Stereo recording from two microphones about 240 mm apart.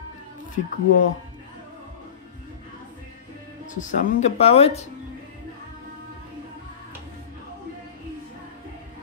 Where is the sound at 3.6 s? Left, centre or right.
Left.